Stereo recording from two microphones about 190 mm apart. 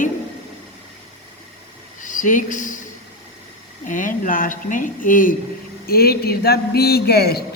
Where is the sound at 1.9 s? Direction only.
40° left (ahead or behind).